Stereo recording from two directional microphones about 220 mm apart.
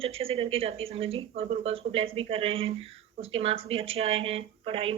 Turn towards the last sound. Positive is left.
turn(degrees=-25)  # may be behind; listen again after turning